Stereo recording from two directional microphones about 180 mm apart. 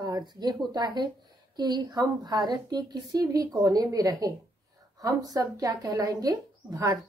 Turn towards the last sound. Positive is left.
turn(degrees=-20)  # may be behind; listen again after turning